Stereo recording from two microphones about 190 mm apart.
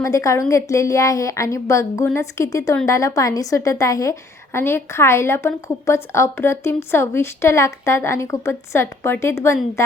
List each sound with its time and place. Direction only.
0.0 s a woman's voice: 15° left (ahead or behind)